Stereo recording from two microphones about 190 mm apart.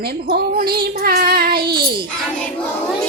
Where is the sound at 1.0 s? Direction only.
50° right (ahead or behind).